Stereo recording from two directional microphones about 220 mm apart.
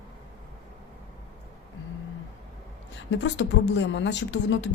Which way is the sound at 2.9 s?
55° left (ahead or behind).